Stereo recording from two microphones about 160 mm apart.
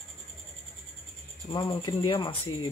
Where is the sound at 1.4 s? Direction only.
30° left (ahead or behind).